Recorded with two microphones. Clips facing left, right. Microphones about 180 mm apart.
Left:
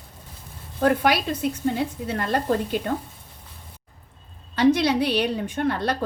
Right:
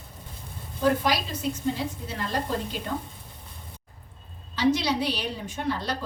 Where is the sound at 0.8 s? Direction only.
60° left (ahead or behind).